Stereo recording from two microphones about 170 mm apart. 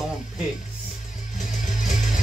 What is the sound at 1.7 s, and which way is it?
Music, 45° left (ahead or behind).